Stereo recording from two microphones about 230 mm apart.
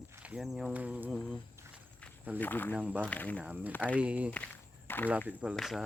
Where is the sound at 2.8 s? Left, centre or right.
Centre.